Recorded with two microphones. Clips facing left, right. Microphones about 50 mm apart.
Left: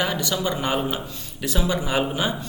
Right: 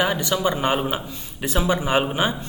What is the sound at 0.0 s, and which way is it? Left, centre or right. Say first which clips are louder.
A man's voice: right 3 dB; right.